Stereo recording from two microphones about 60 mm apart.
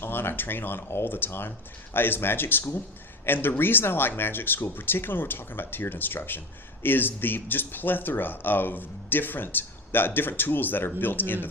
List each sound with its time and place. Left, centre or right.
0.0 s speech: left